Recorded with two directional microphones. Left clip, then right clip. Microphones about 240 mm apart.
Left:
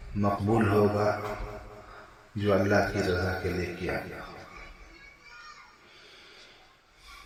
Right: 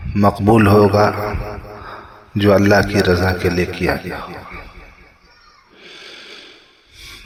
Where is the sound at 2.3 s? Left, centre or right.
Right.